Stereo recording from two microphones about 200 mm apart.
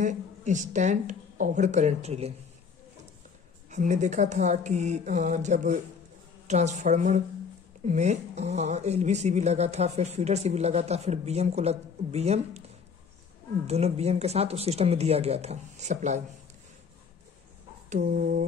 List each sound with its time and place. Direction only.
0.0 s speech: 40° right (ahead or behind)
3.7 s speech: 35° right (ahead or behind)
13.7 s speech: 30° right (ahead or behind)
17.8 s speech: 40° right (ahead or behind)